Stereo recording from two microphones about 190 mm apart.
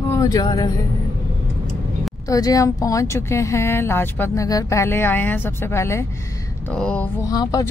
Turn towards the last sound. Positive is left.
turn(degrees=20)  # may be behind; listen again after turning